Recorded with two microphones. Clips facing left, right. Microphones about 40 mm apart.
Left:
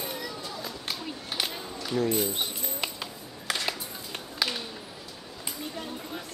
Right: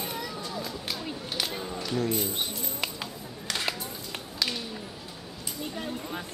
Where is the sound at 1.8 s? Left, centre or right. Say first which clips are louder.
Left 3 dB; centre.